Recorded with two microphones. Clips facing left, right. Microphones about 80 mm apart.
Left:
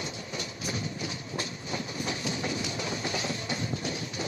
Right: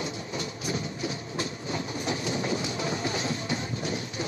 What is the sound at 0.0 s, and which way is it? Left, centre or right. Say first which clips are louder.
Train: right 4 dB; right.